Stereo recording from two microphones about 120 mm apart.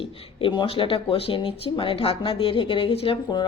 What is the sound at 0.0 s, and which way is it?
Speech, 45° left (ahead or behind).